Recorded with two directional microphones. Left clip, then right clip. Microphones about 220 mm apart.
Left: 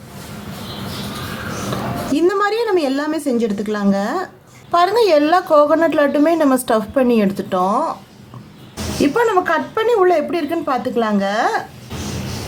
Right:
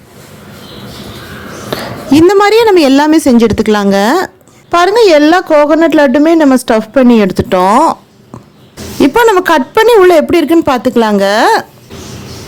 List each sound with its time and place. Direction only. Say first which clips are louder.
2.1 s a woman's voice: right 11 dB; 40° right (ahead or behind)
4.7 s a woman's voice: right 7 dB; 30° right (ahead or behind)
9.0 s a woman's voice: right 8 dB; 45° right (ahead or behind)